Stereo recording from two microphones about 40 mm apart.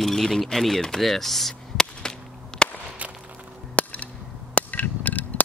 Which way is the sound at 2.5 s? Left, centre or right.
Centre.